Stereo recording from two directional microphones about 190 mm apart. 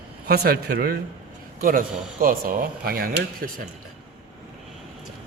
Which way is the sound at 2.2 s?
50° right (ahead or behind).